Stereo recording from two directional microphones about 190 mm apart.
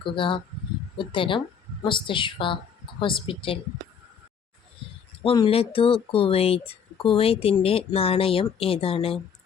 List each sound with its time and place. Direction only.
0.0 s speech: 25° left (ahead or behind)
5.2 s speech: 30° left (ahead or behind)